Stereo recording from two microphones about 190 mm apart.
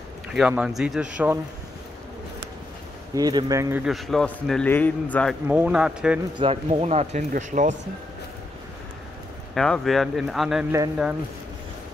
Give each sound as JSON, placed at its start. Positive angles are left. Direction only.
{"t": 0.3, "sound": "a man's voice", "side_deg": -5}
{"t": 3.2, "sound": "speech", "side_deg": -20}
{"t": 3.8, "sound": "a man's voice", "side_deg": 0}
{"t": 5.5, "sound": "a man's voice", "side_deg": -5}
{"t": 6.3, "sound": "speech", "side_deg": -30}
{"t": 9.5, "sound": "a man's voice", "side_deg": 0}